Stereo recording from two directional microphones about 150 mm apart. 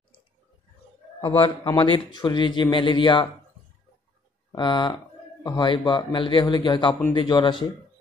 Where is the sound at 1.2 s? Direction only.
35° left (ahead or behind).